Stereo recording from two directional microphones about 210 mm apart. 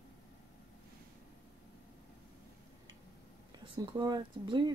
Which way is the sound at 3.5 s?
20° right (ahead or behind).